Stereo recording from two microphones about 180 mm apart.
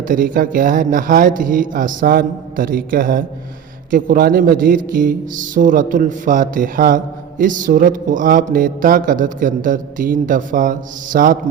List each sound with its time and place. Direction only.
0.0 s a man's voice: 50° right (ahead or behind)